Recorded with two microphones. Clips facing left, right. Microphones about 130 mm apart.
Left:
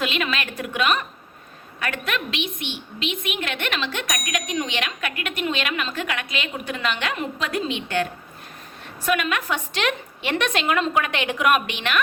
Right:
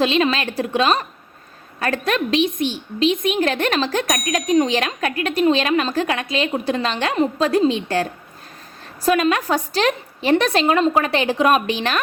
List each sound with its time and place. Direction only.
0.0 s speech: 30° right (ahead or behind)
9.0 s speech: 35° right (ahead or behind)